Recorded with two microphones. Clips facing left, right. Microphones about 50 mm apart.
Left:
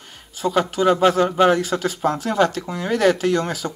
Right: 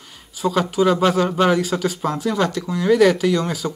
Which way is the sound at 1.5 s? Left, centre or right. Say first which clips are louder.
Right 1 dB; left.